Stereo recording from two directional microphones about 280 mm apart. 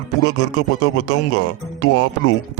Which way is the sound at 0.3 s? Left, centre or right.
Left.